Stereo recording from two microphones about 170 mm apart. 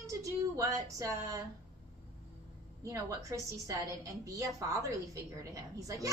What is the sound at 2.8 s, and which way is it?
A woman's voice, 20° right (ahead or behind).